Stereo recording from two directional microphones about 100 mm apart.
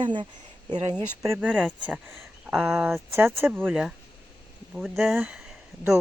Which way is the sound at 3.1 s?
25° right (ahead or behind).